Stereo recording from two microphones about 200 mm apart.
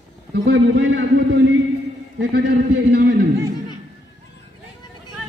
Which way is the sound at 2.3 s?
50° right (ahead or behind).